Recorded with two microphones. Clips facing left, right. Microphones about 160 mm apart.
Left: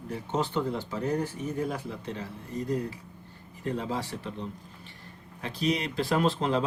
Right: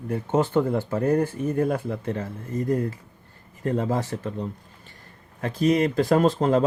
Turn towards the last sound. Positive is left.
turn(degrees=-45)  # may be behind; listen again after turning